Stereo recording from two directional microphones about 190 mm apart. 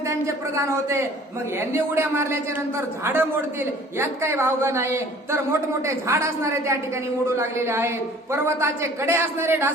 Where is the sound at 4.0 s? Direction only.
10° right (ahead or behind).